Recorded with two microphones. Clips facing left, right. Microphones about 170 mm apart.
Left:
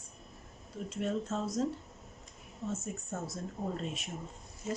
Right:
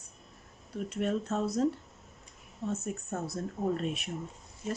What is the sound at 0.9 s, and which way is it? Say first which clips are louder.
Speech: right 3 dB; 65° right (ahead or behind).